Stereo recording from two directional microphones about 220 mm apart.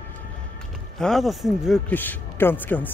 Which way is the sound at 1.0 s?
Centre (ahead or behind).